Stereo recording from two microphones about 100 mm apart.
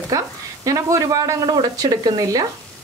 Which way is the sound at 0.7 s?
30° right (ahead or behind).